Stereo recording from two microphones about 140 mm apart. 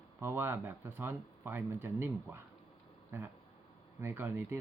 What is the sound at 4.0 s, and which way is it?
Speech, 15° right (ahead or behind).